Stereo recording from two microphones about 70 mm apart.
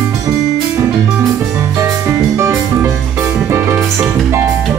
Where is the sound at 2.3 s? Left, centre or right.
Right.